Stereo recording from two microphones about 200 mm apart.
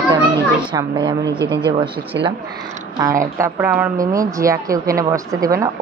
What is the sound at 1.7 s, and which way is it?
Speech, 25° right (ahead or behind).